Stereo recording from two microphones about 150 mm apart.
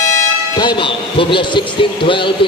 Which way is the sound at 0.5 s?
30° left (ahead or behind).